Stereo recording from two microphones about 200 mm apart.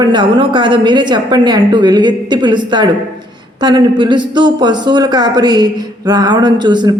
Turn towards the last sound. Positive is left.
turn(degrees=-20)  # may be behind; listen again after turning